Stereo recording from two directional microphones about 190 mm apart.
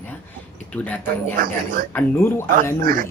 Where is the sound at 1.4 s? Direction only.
45° right (ahead or behind).